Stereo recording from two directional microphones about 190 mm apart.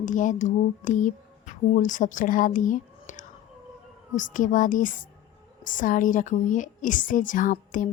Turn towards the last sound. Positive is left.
turn(degrees=45)  # may be behind; listen again after turning